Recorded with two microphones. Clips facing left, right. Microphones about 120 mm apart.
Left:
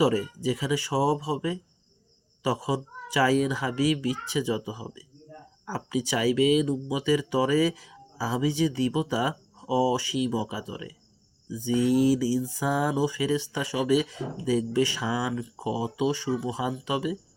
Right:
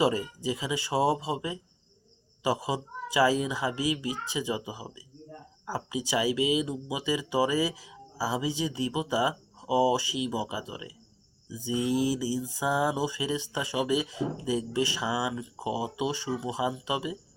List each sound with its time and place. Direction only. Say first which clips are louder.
0.0 s speech: left 3 dB; 15° right (ahead or behind)